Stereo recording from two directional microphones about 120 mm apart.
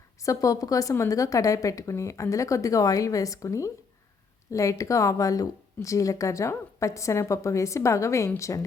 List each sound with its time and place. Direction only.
0.2 s speech: 30° left (ahead or behind)